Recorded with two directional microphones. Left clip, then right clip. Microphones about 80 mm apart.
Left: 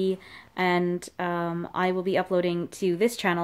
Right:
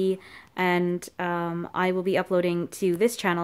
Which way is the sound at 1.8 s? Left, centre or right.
Right.